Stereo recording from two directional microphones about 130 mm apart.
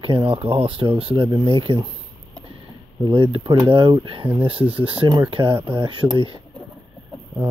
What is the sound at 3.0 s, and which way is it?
Speech, 40° right (ahead or behind).